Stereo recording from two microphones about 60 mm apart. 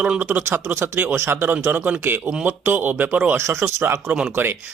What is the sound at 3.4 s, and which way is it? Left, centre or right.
Speech, right.